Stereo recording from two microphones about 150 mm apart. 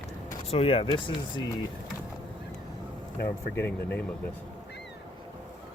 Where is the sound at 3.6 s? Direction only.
10° left (ahead or behind).